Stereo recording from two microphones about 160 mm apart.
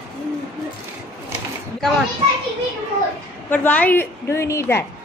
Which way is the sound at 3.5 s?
10° left (ahead or behind).